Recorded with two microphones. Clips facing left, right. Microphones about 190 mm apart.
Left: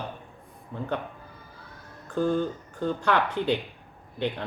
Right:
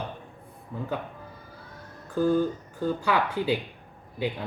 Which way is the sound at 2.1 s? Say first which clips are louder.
Right 2 dB; 5° right (ahead or behind).